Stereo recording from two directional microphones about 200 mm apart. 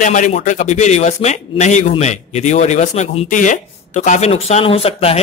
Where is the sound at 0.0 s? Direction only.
40° left (ahead or behind).